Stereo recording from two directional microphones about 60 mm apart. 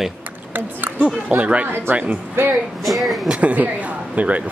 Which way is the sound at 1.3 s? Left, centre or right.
Centre.